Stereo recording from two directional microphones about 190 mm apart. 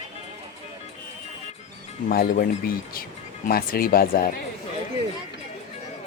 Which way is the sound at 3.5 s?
50° left (ahead or behind).